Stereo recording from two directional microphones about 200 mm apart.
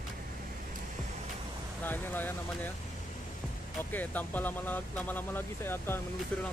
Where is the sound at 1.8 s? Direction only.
10° left (ahead or behind).